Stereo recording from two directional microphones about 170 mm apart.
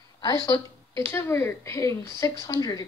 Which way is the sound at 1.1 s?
15° left (ahead or behind).